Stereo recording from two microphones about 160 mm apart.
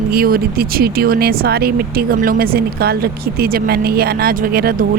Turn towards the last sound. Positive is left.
turn(degrees=-70)  # may be behind; listen again after turning